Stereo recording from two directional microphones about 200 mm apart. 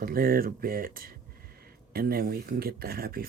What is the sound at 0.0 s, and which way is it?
Speech, 45° right (ahead or behind).